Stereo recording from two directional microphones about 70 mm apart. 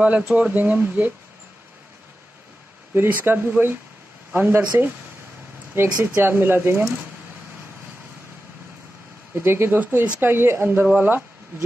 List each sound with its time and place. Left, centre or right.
0.0 s speech: centre
2.9 s speech: right
5.9 s speech: right
9.3 s speech: right